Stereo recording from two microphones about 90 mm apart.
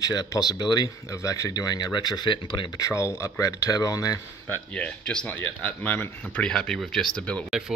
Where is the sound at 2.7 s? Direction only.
35° left (ahead or behind).